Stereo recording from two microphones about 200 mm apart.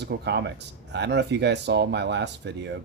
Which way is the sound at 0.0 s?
60° right (ahead or behind).